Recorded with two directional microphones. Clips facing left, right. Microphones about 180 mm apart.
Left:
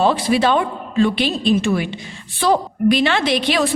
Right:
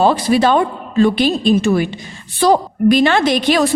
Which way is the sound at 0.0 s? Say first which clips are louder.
Right 3 dB; 40° right (ahead or behind).